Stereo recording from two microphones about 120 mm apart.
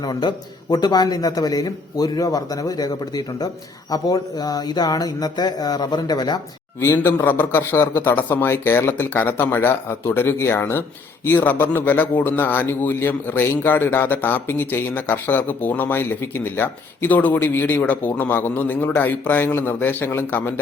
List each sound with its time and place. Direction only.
0.0 s a man's voice: 35° left (ahead or behind)
6.7 s a man's voice: 20° left (ahead or behind)